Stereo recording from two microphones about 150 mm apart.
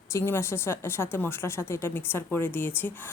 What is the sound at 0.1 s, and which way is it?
A woman's voice, 15° left (ahead or behind).